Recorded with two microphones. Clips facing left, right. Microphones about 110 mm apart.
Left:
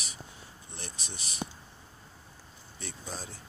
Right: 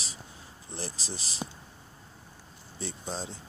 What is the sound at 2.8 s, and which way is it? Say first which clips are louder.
Speech: right 5 dB; 25° right (ahead or behind).